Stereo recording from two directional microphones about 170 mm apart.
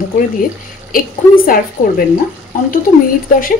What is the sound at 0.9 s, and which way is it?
A woman's voice, 55° left (ahead or behind).